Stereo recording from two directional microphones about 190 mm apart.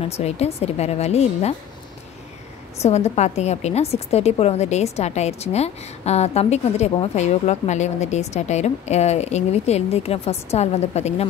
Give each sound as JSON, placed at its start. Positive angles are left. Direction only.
{"t": 0.0, "sound": "a woman's voice", "side_deg": 35}
{"t": 2.8, "sound": "a woman's voice", "side_deg": 35}